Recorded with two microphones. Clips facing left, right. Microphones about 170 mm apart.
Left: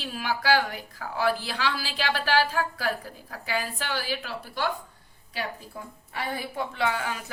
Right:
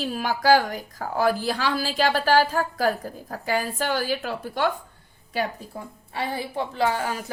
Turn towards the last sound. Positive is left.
turn(degrees=-40)  # may be behind; listen again after turning